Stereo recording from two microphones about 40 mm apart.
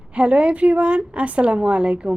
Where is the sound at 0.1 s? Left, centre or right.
Right.